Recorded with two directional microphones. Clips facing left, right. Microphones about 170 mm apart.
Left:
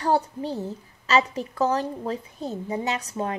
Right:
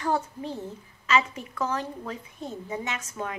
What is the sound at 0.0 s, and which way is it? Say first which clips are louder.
A woman's voice: left 4 dB; 35° left (ahead or behind).